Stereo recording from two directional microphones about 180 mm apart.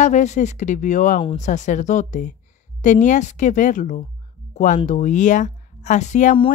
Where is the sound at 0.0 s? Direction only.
40° left (ahead or behind).